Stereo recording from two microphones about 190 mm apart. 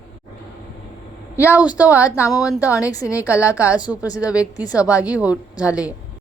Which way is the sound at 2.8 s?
15° left (ahead or behind).